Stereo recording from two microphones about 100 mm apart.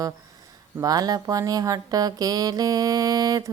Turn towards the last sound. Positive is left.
turn(degrees=-40)  # may be behind; listen again after turning